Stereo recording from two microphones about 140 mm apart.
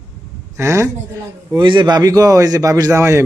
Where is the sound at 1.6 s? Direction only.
35° right (ahead or behind).